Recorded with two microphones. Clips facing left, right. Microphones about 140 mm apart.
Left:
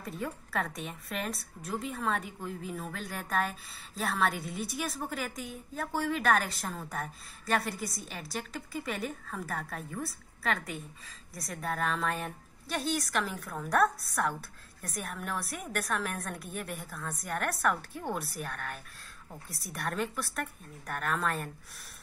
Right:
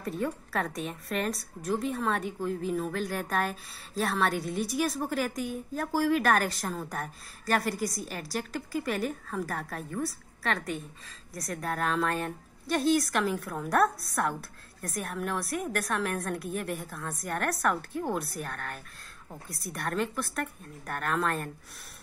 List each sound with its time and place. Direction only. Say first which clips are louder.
0.0 s a woman's voice: right 6 dB; 5° left (ahead or behind)